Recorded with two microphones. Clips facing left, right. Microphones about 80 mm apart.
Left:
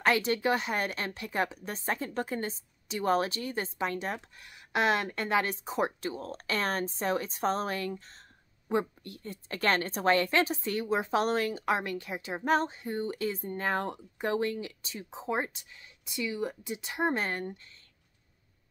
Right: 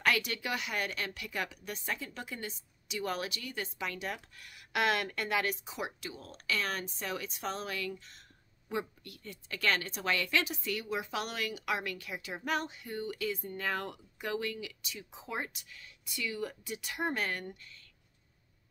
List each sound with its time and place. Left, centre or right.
0.0 s a woman's voice: left